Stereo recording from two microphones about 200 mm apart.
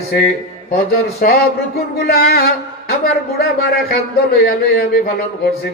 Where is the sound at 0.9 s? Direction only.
50° left (ahead or behind).